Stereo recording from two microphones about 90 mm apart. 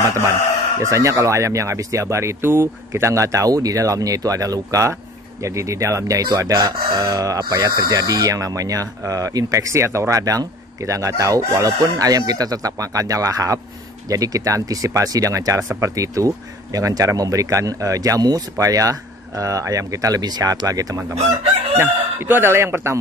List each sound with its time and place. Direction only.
0.8 s speech: 35° right (ahead or behind)
21.7 s speech: 25° right (ahead or behind)